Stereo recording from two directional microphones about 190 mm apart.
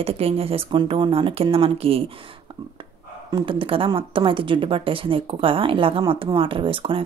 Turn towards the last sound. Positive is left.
turn(degrees=-25)  # may be behind; listen again after turning